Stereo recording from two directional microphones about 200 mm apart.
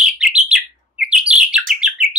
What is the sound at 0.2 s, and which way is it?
Bird, 5° right (ahead or behind).